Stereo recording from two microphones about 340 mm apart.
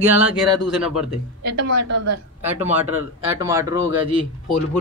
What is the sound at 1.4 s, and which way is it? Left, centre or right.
Speech, right.